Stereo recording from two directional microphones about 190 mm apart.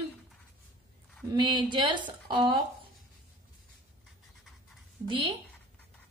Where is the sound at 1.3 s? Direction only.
25° right (ahead or behind).